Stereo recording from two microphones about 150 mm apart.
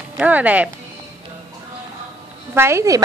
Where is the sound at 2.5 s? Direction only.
20° right (ahead or behind).